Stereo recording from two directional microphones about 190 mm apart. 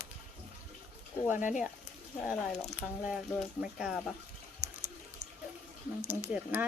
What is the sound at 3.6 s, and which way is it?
Speech, 5° right (ahead or behind).